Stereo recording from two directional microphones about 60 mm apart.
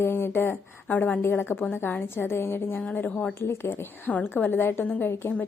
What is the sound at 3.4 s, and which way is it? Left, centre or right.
Speech, left.